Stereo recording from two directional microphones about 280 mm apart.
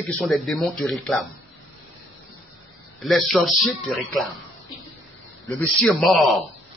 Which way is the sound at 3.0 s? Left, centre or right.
Centre.